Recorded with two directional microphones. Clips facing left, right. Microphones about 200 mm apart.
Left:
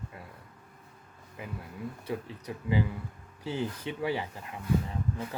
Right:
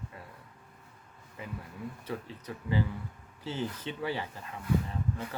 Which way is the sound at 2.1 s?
15° left (ahead or behind).